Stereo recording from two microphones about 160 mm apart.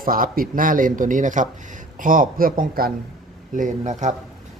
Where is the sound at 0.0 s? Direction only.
60° right (ahead or behind).